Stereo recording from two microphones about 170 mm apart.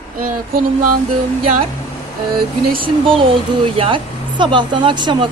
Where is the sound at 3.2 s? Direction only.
30° right (ahead or behind).